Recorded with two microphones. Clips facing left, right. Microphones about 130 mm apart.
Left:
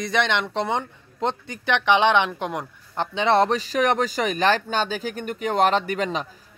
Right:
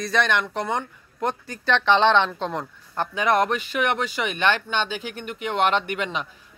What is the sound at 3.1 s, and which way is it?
Speech, 30° left (ahead or behind).